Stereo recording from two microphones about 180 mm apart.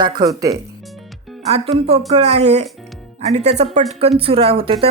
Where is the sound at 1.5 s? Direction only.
35° right (ahead or behind).